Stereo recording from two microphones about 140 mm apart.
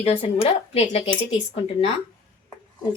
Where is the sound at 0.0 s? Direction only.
45° left (ahead or behind).